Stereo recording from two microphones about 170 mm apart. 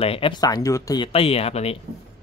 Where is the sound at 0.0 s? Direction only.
35° left (ahead or behind).